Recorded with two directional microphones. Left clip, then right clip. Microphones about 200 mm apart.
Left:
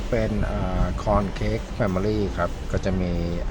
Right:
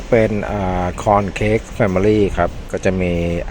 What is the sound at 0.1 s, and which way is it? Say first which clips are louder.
Speech: right 11 dB; 30° right (ahead or behind).